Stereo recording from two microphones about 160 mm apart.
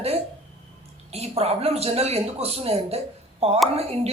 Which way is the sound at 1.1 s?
40° right (ahead or behind).